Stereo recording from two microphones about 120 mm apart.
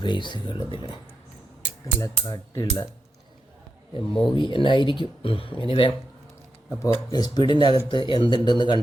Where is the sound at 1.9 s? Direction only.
25° left (ahead or behind).